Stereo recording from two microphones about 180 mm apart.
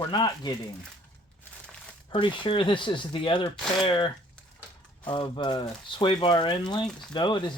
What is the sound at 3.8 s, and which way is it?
Speech, 25° left (ahead or behind).